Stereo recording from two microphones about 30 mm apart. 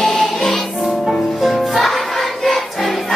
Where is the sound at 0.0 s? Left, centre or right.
Centre.